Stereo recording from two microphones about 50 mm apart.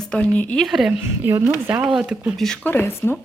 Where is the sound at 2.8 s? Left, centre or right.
Left.